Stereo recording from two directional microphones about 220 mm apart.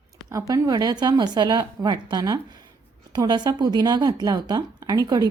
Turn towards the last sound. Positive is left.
turn(degrees=-15)  # may be behind; listen again after turning